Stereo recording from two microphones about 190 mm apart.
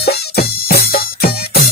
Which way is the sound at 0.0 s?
55° left (ahead or behind).